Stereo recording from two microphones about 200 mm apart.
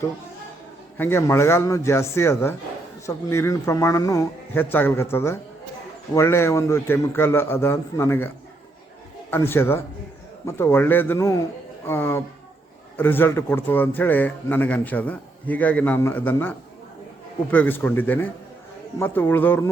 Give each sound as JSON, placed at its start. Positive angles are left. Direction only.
{"t": 0.9, "sound": "a man's voice", "side_deg": 10}
{"t": 9.3, "sound": "a man's voice", "side_deg": 10}